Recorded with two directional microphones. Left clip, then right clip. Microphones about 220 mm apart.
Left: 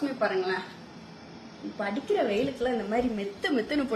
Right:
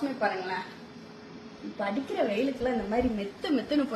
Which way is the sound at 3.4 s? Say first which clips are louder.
Even; 35° left (ahead or behind).